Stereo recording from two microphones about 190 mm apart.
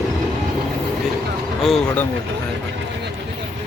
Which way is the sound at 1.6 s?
Centre (ahead or behind).